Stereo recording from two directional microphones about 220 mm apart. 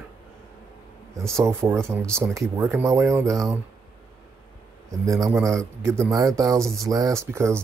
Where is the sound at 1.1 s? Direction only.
15° right (ahead or behind).